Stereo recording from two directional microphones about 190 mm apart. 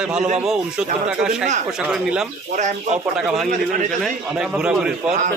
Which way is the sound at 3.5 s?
40° right (ahead or behind).